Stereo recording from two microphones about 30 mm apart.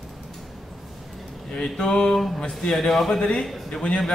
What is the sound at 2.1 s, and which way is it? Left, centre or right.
Speech, centre.